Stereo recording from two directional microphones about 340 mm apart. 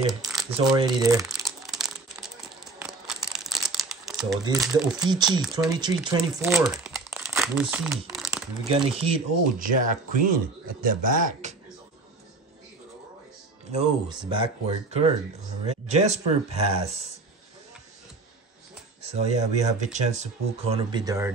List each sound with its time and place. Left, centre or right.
0.0 s crumpling: centre
0.5 s crumpling: centre
4.9 s speech: centre
5.4 s speech: centre
5.8 s speech: centre
8.6 s speech: centre
13.7 s speech: centre
15.6 s speech: centre
19.0 s speech: centre